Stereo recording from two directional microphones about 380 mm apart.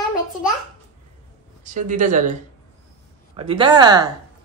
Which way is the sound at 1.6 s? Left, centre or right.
Centre.